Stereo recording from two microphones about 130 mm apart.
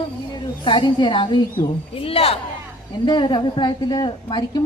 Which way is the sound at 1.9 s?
45° left (ahead or behind).